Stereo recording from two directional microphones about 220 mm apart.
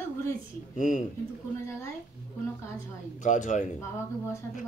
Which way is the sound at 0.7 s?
35° left (ahead or behind).